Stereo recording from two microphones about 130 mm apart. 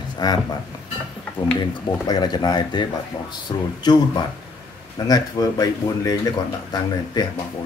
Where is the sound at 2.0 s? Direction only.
30° left (ahead or behind).